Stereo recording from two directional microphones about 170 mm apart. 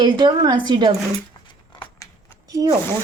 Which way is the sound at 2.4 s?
20° right (ahead or behind).